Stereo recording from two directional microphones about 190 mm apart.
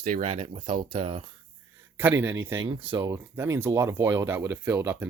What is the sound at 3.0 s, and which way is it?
Speech, 10° right (ahead or behind).